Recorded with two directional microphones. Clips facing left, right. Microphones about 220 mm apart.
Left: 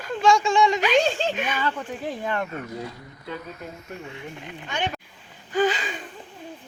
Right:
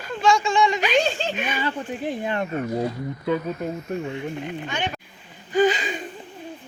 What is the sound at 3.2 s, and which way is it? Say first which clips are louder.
Speech: right 10 dB; 70° right (ahead or behind).